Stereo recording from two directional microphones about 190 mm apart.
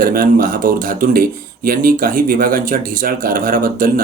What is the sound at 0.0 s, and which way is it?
Speech, 50° right (ahead or behind).